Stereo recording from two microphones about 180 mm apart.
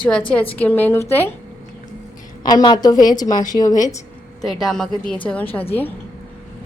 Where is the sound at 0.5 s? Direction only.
10° left (ahead or behind).